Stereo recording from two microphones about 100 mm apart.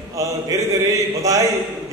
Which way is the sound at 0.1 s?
35° right (ahead or behind).